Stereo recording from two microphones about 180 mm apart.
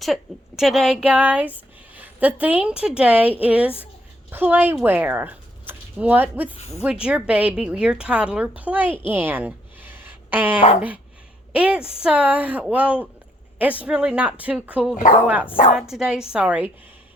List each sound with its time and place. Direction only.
0.0 s a woman's voice: centre (ahead or behind)
6.6 s speech: 35° left (ahead or behind)
6.8 s speech: 5° right (ahead or behind)
9.0 s a sound: 10° right (ahead or behind)
10.8 s a woman's voice: 10° right (ahead or behind)